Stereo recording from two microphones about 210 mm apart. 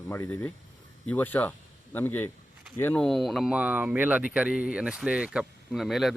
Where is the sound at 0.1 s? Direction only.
10° left (ahead or behind).